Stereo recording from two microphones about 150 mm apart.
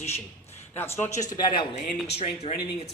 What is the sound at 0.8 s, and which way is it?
Speech, 15° left (ahead or behind).